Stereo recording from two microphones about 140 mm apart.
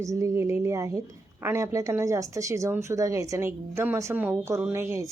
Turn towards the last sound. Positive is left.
turn(degrees=-20)  # may be behind; listen again after turning